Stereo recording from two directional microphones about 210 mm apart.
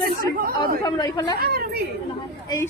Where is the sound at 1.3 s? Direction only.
50° right (ahead or behind).